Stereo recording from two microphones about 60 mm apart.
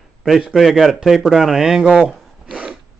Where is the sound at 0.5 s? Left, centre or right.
Centre.